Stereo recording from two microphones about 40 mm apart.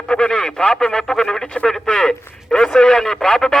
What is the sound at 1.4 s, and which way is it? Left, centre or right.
Speech, left.